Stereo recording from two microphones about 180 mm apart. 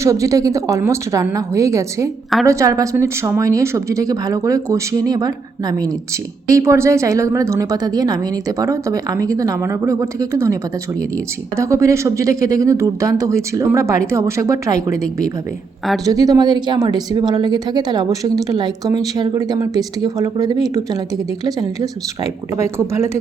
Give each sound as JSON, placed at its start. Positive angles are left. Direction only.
{"t": 0.0, "sound": "a woman's voice", "side_deg": -15}
{"t": 16.0, "sound": "speech", "side_deg": -20}
{"t": 22.2, "sound": "a woman's voice", "side_deg": -15}